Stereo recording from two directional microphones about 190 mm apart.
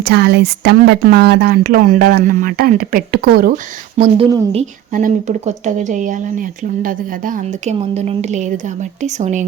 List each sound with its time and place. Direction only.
0.0 s speech: 60° right (ahead or behind)
4.2 s a woman's voice: 30° right (ahead or behind)
4.9 s speech: 45° right (ahead or behind)